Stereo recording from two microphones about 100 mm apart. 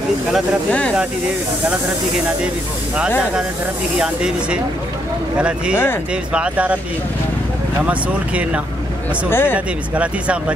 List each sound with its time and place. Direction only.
0.7 s speech: 15° left (ahead or behind)
4.0 s speech: 10° right (ahead or behind)
6.3 s speech: 10° right (ahead or behind)
7.8 s speech: 15° right (ahead or behind)
9.3 s speech: 25° left (ahead or behind)
9.9 s speech: 10° right (ahead or behind)